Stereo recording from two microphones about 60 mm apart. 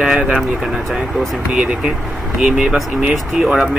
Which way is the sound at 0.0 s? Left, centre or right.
Centre.